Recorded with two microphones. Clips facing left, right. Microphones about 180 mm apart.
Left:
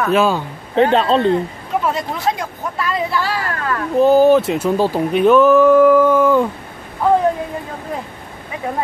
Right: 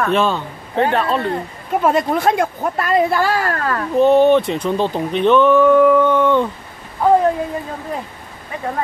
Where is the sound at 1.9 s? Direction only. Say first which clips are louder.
Right 8 dB; 50° right (ahead or behind).